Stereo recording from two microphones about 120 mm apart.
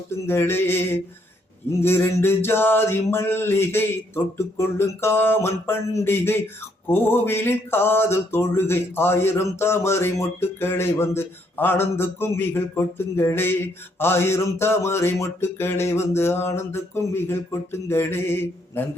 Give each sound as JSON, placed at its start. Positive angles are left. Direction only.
{"t": 0.1, "sound": "mantra", "side_deg": 20}